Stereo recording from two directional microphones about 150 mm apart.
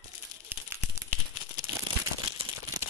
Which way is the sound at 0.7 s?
15° right (ahead or behind).